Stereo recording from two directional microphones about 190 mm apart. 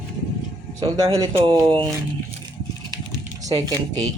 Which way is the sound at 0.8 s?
20° right (ahead or behind).